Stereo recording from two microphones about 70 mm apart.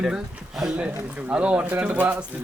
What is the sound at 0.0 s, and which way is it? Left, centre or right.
Speech, centre.